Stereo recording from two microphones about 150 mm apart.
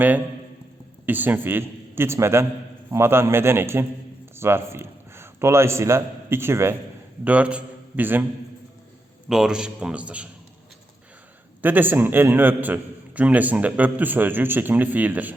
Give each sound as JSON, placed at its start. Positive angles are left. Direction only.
{"t": 1.0, "sound": "a man's voice", "side_deg": -10}
{"t": 9.3, "sound": "a man's voice", "side_deg": -5}
{"t": 11.6, "sound": "a man's voice", "side_deg": -10}